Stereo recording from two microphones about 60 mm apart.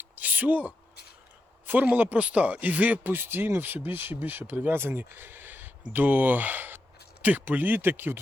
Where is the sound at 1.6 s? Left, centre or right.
Right.